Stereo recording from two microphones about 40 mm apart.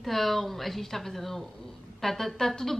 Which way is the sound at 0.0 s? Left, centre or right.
Centre.